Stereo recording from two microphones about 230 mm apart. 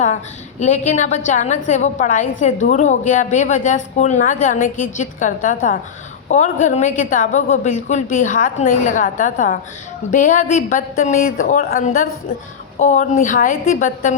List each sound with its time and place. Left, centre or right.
0.6 s a woman's voice: left